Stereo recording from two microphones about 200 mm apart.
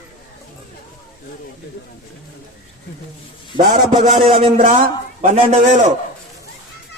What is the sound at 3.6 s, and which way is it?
A man's voice, 20° right (ahead or behind).